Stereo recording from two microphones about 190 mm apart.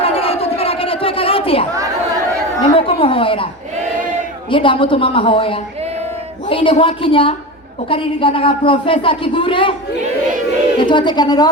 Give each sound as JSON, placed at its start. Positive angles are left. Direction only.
{"t": 0.0, "sound": "crowd", "side_deg": 30}
{"t": 2.6, "sound": "a woman's voice", "side_deg": 30}
{"t": 10.8, "sound": "speech", "side_deg": 25}